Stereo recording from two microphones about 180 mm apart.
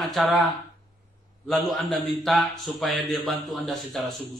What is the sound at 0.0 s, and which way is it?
A man's voice, centre (ahead or behind).